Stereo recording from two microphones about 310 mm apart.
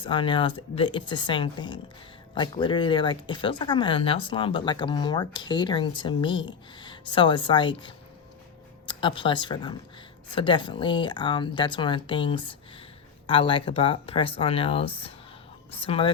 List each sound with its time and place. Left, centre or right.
0.0 s speech: centre